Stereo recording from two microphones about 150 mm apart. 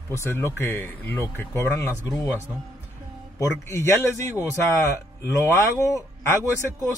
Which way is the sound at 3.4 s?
20° left (ahead or behind).